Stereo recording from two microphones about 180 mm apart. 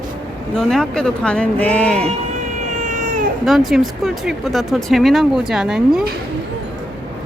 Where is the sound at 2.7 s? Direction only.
45° right (ahead or behind).